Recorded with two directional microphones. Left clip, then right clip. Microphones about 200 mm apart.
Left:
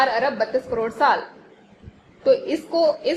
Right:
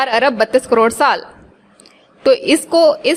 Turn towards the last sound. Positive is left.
turn(degrees=-45)  # may be behind; listen again after turning